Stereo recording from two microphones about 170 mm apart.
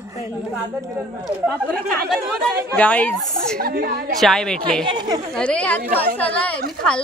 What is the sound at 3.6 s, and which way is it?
Speech, 60° right (ahead or behind).